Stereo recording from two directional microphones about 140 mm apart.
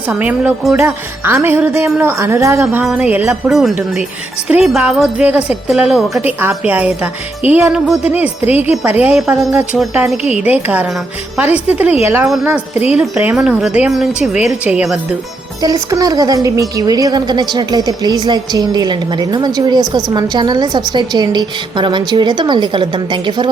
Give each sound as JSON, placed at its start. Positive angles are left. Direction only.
{"t": 0.1, "sound": "speech", "side_deg": -10}
{"t": 2.8, "sound": "speech", "side_deg": -10}
{"t": 3.5, "sound": "a woman's voice", "side_deg": 0}
{"t": 8.4, "sound": "a woman's voice", "side_deg": 45}
{"t": 9.0, "sound": "speech", "side_deg": -10}
{"t": 9.3, "sound": "a woman's voice", "side_deg": -20}
{"t": 9.7, "sound": "a woman's voice", "side_deg": 0}
{"t": 10.4, "sound": "a woman's voice", "side_deg": -10}
{"t": 12.5, "sound": "speech", "side_deg": -15}
{"t": 15.6, "sound": "a woman's voice", "side_deg": -25}